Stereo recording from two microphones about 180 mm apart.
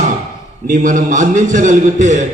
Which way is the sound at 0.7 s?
45° right (ahead or behind).